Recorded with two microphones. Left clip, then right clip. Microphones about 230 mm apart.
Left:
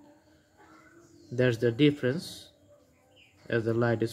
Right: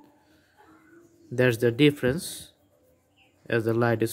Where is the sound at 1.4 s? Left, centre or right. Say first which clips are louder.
Right 4 dB; right.